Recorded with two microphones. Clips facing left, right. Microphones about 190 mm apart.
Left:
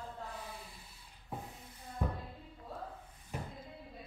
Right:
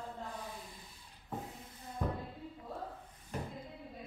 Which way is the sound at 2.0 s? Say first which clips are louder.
Right 1 dB; 10° left (ahead or behind).